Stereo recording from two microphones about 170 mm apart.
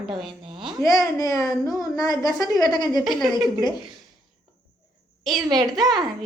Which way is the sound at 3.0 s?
Centre (ahead or behind).